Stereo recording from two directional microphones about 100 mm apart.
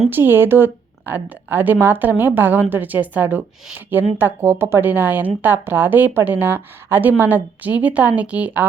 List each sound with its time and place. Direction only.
0.1 s a woman's voice: 20° right (ahead or behind)